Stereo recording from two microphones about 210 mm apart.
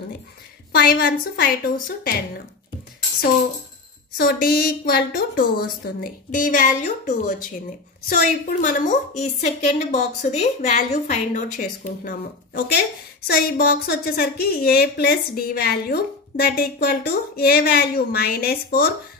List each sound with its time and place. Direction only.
0.7 s a woman's voice: 50° left (ahead or behind)
4.2 s a woman's voice: 45° left (ahead or behind)